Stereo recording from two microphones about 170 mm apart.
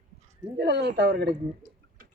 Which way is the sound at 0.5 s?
80° right.